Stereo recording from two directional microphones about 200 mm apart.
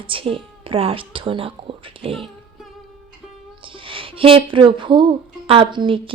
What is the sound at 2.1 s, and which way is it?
Music, centre (ahead or behind).